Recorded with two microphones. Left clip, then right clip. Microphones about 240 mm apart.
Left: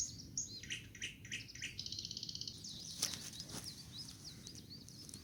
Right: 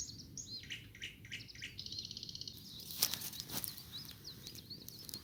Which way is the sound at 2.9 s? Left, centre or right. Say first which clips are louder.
Right 5 dB; right.